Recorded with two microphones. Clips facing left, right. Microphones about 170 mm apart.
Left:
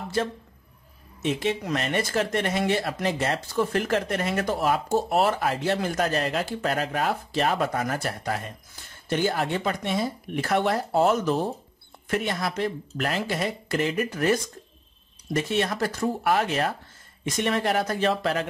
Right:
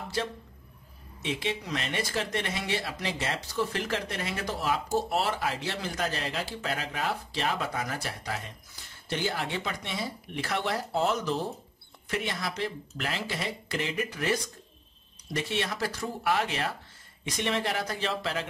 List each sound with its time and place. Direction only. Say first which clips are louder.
1.2 s speech: left 6 dB; 45° left (ahead or behind)